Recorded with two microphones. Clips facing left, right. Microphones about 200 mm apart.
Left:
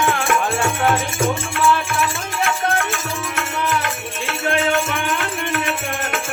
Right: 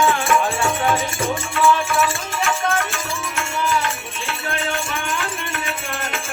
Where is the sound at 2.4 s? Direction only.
55° left (ahead or behind).